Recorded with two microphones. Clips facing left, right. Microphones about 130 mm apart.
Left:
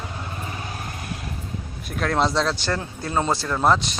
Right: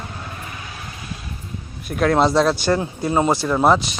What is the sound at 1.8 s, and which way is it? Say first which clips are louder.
Speech: right 6 dB; 5° right (ahead or behind).